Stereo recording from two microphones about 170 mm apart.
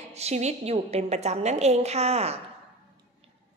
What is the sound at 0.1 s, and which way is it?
A woman's voice, 40° right (ahead or behind).